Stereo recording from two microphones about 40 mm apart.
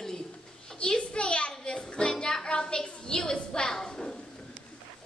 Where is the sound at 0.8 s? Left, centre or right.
Left.